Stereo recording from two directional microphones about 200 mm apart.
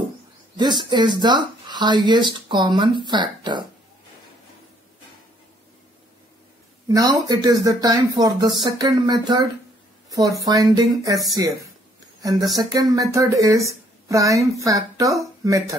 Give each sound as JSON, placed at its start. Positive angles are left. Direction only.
{"t": 0.6, "sound": "speech", "side_deg": -20}
{"t": 6.9, "sound": "speech", "side_deg": -20}
{"t": 10.0, "sound": "a sound", "side_deg": -15}
{"t": 10.4, "sound": "a woman's voice", "side_deg": -20}